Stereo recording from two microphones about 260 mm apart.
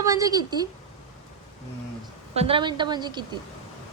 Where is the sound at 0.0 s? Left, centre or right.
Centre.